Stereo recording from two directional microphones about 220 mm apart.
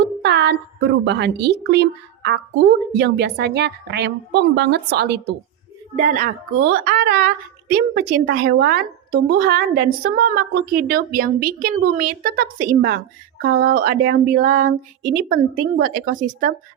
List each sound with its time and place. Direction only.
0.0 s speech: 50° right (ahead or behind)
6.0 s speech: 35° right (ahead or behind)
10.2 s female singing: 45° right (ahead or behind)